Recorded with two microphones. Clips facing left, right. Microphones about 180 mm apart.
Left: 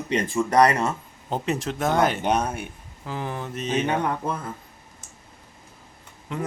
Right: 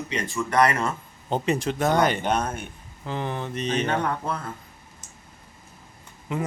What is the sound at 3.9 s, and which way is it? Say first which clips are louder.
Speech: left 1 dB; 15° left (ahead or behind).